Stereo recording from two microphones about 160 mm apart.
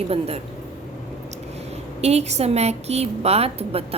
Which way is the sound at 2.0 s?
40° right (ahead or behind).